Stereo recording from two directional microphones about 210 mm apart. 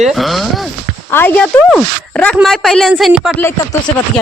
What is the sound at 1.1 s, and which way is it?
Speech, 10° left (ahead or behind).